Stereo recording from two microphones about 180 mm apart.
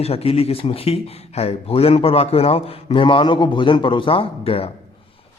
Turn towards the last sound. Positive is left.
turn(degrees=30)  # may be behind; listen again after turning